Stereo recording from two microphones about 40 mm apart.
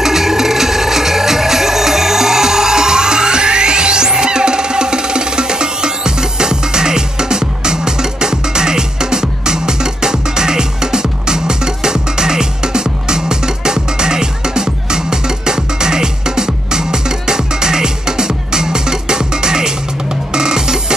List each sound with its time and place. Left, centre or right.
0.0 s music: centre